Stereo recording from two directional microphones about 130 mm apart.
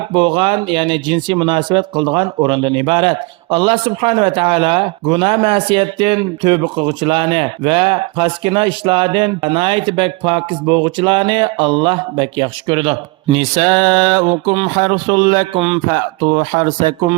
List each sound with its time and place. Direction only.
0.1 s speech: 40° right (ahead or behind)